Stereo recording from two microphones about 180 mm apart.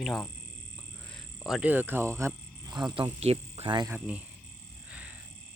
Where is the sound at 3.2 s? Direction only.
35° right (ahead or behind).